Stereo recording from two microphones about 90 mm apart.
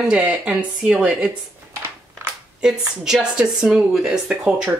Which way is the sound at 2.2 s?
30° right (ahead or behind).